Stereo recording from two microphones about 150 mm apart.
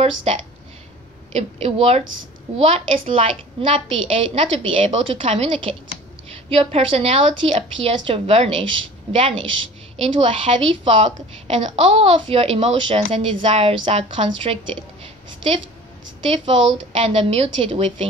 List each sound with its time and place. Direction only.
0.0 s a woman's voice: 40° right (ahead or behind)
16.3 s a woman's voice: 35° right (ahead or behind)